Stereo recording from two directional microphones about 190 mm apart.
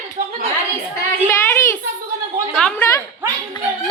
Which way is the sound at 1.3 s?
15° left (ahead or behind).